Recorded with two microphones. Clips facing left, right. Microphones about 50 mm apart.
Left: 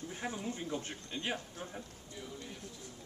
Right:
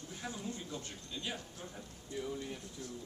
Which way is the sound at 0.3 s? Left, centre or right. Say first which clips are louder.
Left 3 dB; left.